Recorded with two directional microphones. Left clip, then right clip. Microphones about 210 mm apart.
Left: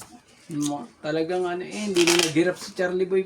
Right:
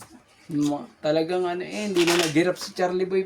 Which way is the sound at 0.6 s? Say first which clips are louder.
Right 4 dB; 45° right (ahead or behind).